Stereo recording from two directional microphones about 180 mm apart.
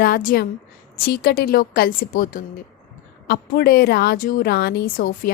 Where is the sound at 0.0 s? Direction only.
55° left (ahead or behind).